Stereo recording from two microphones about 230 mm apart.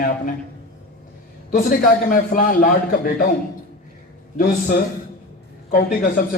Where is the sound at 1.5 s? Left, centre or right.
Left.